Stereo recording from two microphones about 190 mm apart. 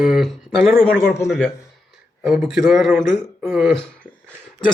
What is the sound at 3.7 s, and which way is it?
Speech, 5° left (ahead or behind).